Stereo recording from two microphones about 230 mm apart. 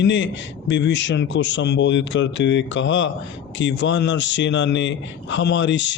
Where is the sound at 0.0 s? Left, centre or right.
Left.